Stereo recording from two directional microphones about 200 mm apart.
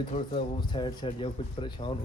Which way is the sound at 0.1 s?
25° left (ahead or behind).